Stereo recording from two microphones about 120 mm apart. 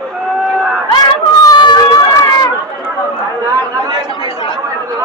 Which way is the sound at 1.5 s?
40° left (ahead or behind).